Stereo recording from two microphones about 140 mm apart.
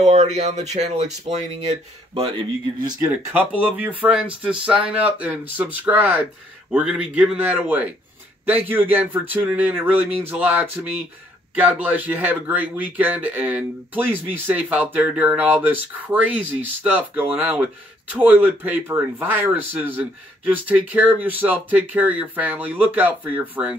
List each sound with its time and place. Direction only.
0.0 s speech: 55° right (ahead or behind)
3.3 s a man's voice: 10° right (ahead or behind)